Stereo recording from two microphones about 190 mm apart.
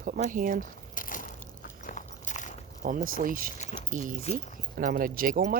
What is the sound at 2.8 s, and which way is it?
Speech, 45° right (ahead or behind).